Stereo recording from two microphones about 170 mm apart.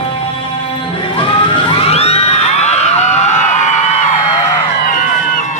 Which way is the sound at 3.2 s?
45° left (ahead or behind).